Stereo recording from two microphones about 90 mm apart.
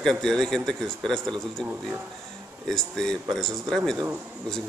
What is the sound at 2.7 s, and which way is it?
A man's voice, 5° left (ahead or behind).